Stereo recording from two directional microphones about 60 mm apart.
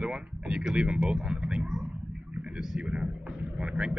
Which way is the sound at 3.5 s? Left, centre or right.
Centre.